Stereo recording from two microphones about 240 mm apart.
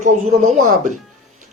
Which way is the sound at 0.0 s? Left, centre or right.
Right.